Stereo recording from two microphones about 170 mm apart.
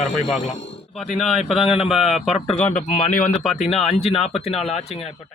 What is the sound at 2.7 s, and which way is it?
Speech, 40° left (ahead or behind).